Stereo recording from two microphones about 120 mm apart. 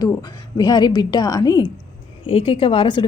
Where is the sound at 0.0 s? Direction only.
35° left (ahead or behind).